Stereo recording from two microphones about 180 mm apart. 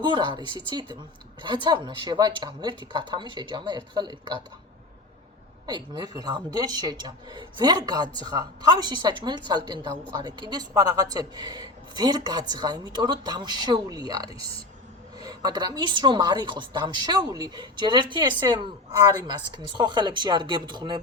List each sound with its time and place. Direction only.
0.0 s speech: 25° right (ahead or behind)
5.6 s speech: 25° right (ahead or behind)